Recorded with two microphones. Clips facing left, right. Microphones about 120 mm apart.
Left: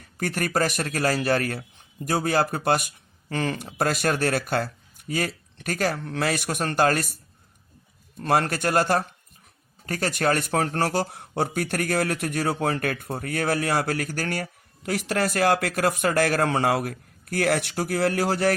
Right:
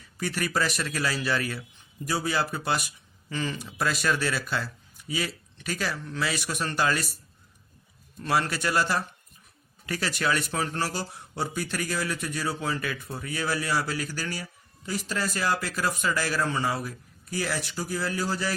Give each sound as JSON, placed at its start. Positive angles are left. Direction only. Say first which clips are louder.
{"t": 0.0, "sound": "speech", "louder": "left 3 dB", "side_deg": 55}
{"t": 8.2, "sound": "speech", "louder": "left 4 dB", "side_deg": 50}